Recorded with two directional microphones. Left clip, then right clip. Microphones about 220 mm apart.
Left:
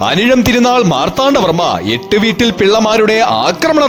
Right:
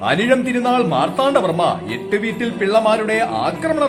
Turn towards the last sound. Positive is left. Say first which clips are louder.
# left 8 dB
turn(degrees=50)  # may be behind; listen again after turning